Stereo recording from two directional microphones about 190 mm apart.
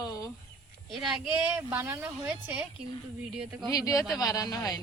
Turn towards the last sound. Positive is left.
turn(degrees=20)  # may be behind; listen again after turning